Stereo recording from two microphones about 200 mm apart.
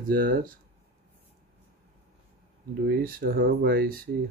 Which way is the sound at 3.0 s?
45° right (ahead or behind).